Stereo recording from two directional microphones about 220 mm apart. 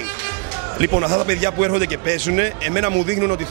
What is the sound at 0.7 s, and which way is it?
A man's voice, 20° right (ahead or behind).